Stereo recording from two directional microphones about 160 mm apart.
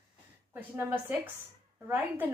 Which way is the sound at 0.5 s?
10° right (ahead or behind).